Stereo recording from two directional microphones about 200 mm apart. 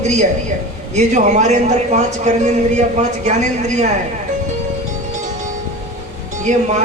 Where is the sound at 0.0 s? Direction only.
35° right (ahead or behind).